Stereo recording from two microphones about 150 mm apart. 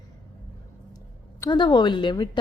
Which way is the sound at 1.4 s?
30° left (ahead or behind).